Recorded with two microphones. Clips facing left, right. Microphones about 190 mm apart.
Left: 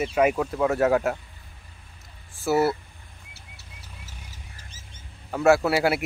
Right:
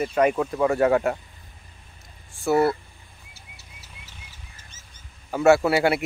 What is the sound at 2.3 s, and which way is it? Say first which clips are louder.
Speech: right 2 dB; centre (ahead or behind).